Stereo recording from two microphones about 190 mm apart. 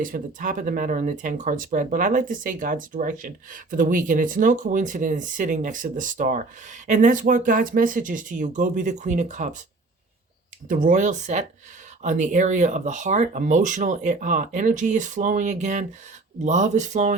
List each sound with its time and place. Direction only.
0.0 s speech: 45° right (ahead or behind)
10.8 s speech: 40° right (ahead or behind)